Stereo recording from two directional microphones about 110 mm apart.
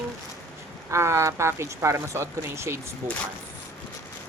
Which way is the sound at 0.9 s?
25° right (ahead or behind).